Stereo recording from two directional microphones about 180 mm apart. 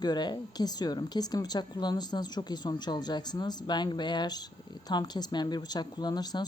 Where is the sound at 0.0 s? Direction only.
25° left (ahead or behind).